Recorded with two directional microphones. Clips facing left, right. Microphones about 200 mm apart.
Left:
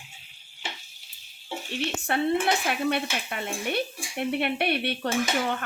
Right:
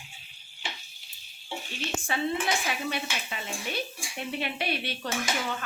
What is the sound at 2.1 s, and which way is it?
Speech, 60° left (ahead or behind).